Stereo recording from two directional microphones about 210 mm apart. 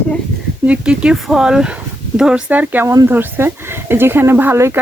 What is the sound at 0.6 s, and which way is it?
Speech, 5° right (ahead or behind).